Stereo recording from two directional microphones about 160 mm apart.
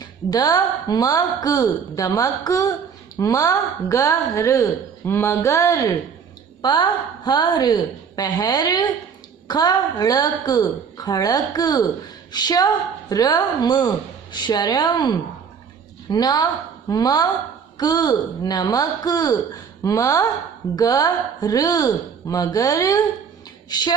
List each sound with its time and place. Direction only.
0.0 s a woman's voice: 25° left (ahead or behind)